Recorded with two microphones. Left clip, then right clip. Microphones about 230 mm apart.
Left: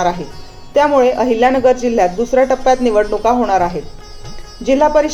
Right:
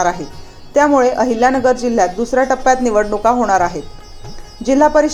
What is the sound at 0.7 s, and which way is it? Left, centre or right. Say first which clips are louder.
A woman's voice: left 1 dB; right.